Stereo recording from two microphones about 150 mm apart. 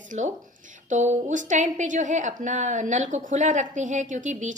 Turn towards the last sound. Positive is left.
turn(degrees=-55)  # may be behind; listen again after turning